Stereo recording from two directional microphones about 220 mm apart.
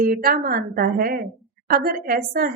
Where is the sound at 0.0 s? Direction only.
40° right (ahead or behind).